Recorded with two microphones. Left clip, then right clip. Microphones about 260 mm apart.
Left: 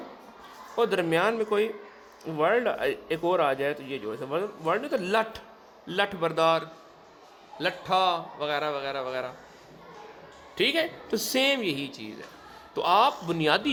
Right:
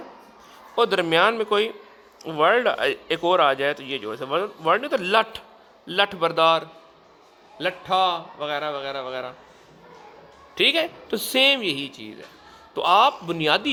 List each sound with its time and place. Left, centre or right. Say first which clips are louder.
0.8 s a man's voice: right 6 dB; right; by 9.3 s centre
10.6 s a man's voice: right 5 dB; centre